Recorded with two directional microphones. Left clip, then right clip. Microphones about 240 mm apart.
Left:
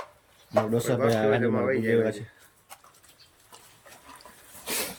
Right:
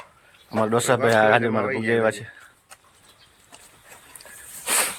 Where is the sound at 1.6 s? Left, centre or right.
Centre.